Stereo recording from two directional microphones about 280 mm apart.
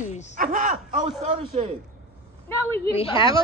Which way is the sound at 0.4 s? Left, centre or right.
Right.